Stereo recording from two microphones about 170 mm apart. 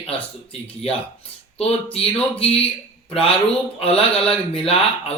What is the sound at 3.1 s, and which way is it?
Mantra, 5° left (ahead or behind).